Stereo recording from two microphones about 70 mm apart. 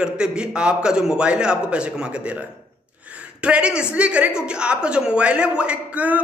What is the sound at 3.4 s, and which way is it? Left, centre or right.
Speech, centre.